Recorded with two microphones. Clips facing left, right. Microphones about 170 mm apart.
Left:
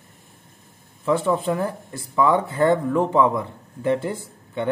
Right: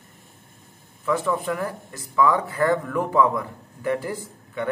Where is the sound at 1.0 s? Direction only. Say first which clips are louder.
Left 3 dB; 30° left (ahead or behind).